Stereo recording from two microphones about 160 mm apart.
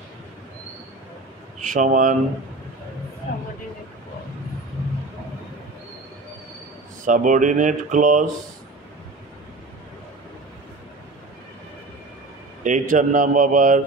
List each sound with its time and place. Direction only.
1.6 s speech: 55° right (ahead or behind)
7.1 s speech: 50° right (ahead or behind)
12.6 s speech: 55° right (ahead or behind)